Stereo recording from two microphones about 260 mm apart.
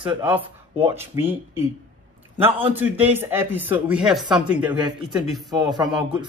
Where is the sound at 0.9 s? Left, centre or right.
Centre.